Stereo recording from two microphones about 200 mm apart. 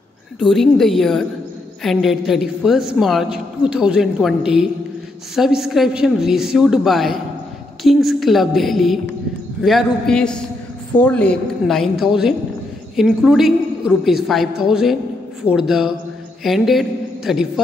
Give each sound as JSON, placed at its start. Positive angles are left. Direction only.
{"t": 0.4, "sound": "a woman's voice", "side_deg": 0}